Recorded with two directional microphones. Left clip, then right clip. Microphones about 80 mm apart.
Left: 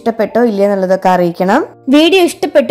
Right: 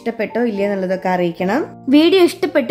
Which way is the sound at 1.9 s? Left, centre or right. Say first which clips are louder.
Left 3 dB; left.